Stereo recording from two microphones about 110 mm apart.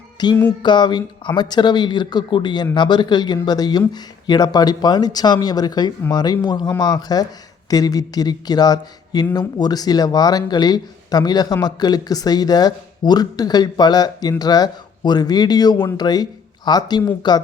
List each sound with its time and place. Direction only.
0.2 s music: 40° left (ahead or behind)
0.6 s speech: 45° left (ahead or behind)